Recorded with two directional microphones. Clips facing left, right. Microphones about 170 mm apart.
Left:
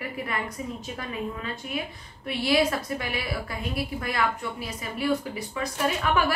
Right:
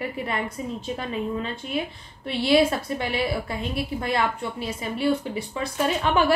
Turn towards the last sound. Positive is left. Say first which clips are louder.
# right 3 dB
turn(degrees=-25)  # may be behind; listen again after turning